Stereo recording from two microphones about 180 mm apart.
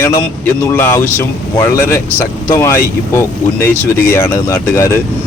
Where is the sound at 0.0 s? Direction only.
15° left (ahead or behind).